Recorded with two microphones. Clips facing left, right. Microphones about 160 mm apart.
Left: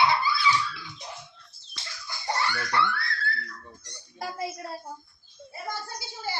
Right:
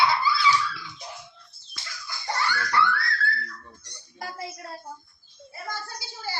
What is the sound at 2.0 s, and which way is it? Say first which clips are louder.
Baby laughter: even; 25° left (ahead or behind).